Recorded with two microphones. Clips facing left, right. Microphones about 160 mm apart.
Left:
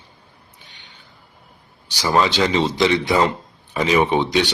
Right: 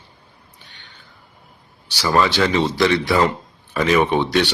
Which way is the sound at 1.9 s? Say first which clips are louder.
Even; 15° left (ahead or behind).